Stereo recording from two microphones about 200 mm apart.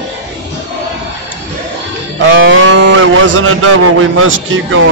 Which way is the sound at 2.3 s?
65° right (ahead or behind).